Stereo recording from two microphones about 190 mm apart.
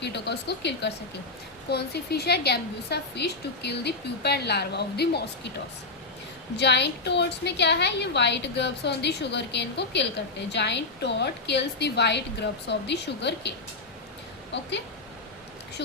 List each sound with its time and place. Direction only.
0.0 s a woman's voice: 65° left (ahead or behind)
6.6 s a woman's voice: 65° left (ahead or behind)